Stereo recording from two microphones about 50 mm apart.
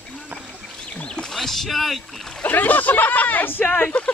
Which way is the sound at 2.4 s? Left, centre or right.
Left.